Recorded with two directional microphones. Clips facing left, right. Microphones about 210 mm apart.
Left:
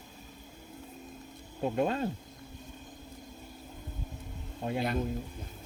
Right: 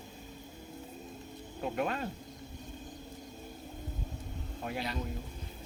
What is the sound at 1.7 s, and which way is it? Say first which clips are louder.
Speech: left 4 dB; 25° left (ahead or behind).